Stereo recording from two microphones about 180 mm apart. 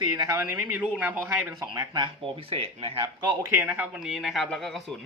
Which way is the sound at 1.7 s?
25° right (ahead or behind).